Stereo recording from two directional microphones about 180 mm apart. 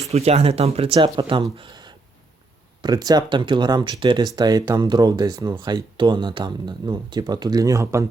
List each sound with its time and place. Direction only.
0.1 s speech: 35° right (ahead or behind)
1.5 s a sound: 25° right (ahead or behind)
2.8 s speech: 20° right (ahead or behind)